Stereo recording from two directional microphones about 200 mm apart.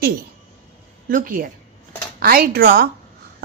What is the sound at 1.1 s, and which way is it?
A woman's voice, 45° right (ahead or behind).